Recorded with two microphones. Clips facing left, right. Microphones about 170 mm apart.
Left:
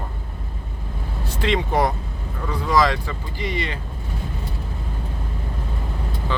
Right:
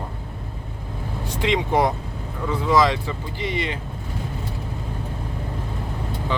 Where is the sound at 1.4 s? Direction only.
20° right (ahead or behind).